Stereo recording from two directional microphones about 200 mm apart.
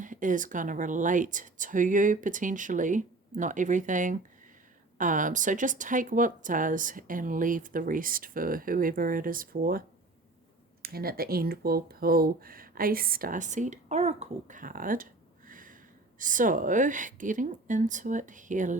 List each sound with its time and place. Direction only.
0.0 s speech: 40° right (ahead or behind)
10.8 s speech: 50° right (ahead or behind)